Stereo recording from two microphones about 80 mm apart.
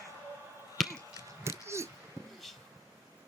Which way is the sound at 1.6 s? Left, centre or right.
Right.